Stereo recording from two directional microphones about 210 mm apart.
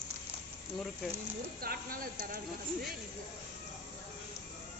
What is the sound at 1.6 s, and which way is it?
Speech, 45° right (ahead or behind).